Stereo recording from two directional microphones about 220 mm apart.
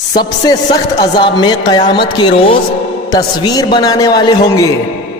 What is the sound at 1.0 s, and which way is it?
A woman's voice, 20° left (ahead or behind).